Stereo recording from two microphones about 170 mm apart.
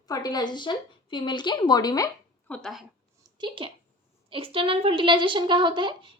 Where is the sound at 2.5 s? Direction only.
Centre (ahead or behind).